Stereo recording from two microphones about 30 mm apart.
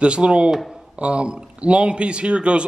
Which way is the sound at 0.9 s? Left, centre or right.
Right.